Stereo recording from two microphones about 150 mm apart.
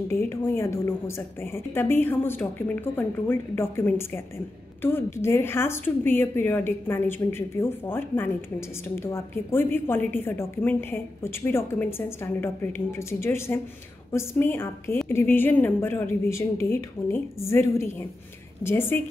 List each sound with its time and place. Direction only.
0.1 s speech: 15° left (ahead or behind)